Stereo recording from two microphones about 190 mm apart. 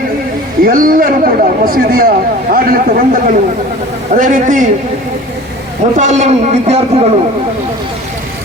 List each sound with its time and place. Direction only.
0.6 s a man's voice: 45° right (ahead or behind)
6.0 s a man's voice: 40° right (ahead or behind)